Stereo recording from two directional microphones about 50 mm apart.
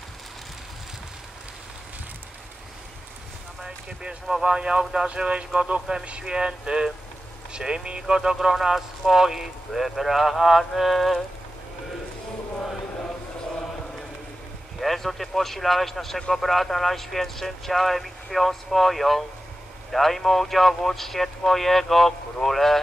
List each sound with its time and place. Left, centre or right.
3.6 s speech: centre
14.8 s speech: centre